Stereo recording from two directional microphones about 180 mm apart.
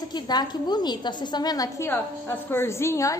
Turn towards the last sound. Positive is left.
turn(degrees=15)  # may be behind; listen again after turning